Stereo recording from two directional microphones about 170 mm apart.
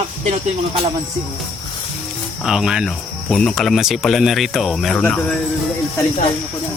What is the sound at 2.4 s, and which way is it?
Cricket, centre (ahead or behind).